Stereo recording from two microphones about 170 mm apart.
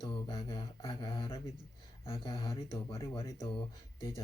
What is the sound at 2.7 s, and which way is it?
Speech, 15° left (ahead or behind).